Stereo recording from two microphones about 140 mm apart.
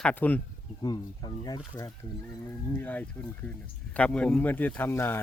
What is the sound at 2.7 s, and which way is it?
Speech, 10° left (ahead or behind).